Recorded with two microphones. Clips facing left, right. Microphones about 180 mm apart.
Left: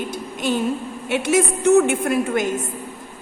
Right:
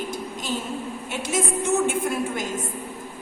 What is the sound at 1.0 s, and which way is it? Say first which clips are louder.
A woman's voice: left 8 dB; 70° left (ahead or behind).